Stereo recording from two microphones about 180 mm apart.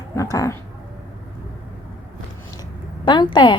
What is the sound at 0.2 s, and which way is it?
Speech, 15° left (ahead or behind).